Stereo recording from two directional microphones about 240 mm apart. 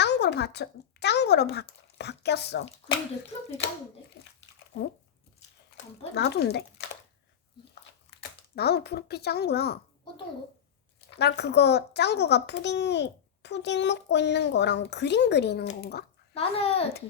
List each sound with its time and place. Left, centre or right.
0.0 s speech: left
4.7 s speech: left
6.1 s speech: left
8.5 s speech: left
11.1 s speech: left
16.3 s a child's voice: left